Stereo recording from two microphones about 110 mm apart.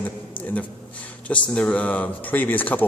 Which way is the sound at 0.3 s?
15° left (ahead or behind).